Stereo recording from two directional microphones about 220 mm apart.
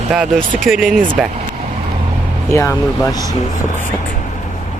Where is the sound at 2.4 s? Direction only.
10° left (ahead or behind).